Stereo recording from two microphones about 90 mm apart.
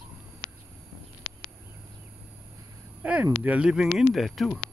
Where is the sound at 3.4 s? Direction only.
10° right (ahead or behind).